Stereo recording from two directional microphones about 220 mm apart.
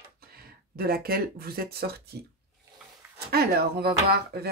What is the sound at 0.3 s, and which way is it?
Speech, 45° right (ahead or behind).